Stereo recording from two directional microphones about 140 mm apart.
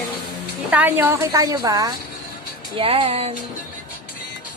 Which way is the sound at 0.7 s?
10° right (ahead or behind).